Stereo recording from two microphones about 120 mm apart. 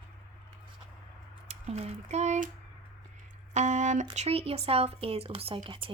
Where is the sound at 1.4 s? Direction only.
65° right (ahead or behind).